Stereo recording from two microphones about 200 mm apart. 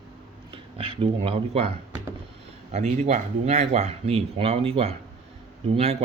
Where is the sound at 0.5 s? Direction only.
30° right (ahead or behind).